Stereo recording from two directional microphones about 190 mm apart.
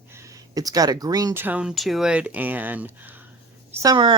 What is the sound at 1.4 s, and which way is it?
A woman's voice, 5° right (ahead or behind).